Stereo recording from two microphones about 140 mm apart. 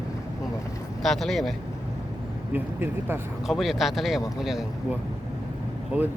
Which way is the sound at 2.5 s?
15° right (ahead or behind).